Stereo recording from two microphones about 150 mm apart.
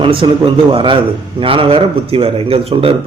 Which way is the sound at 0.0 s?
35° right (ahead or behind).